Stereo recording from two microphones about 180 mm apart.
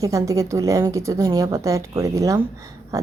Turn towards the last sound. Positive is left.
turn(degrees=-15)  # may be behind; listen again after turning